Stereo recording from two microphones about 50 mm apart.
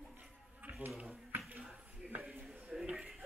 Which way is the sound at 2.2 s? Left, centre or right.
Centre.